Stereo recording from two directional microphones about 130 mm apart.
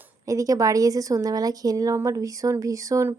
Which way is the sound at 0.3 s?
25° right (ahead or behind).